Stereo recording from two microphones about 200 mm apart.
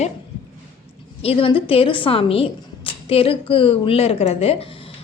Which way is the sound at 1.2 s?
30° left (ahead or behind).